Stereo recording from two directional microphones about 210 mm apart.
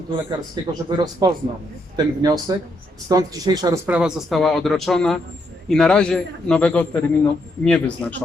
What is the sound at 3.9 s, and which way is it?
A woman's voice, centre (ahead or behind).